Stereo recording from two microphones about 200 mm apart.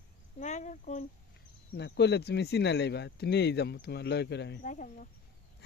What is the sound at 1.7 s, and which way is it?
Speech, 60° left (ahead or behind).